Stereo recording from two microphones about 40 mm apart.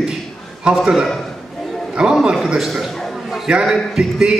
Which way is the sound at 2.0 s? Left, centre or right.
Right.